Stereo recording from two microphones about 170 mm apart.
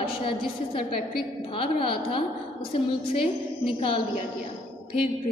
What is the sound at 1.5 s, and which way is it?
A woman's voice, 30° left (ahead or behind).